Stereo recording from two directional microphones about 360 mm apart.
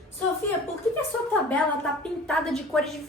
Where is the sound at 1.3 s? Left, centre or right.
Centre.